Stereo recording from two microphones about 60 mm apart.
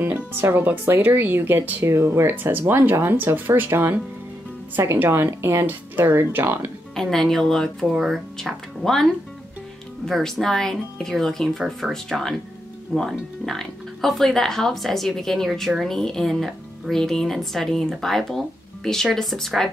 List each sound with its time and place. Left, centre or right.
0.0 s speech: right
1.9 s speech: right
7.0 s speech: centre
7.8 s speech: centre
8.4 s speech: centre
10.0 s speech: centre